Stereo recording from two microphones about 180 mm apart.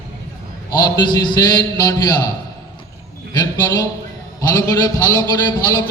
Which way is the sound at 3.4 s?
20° left (ahead or behind).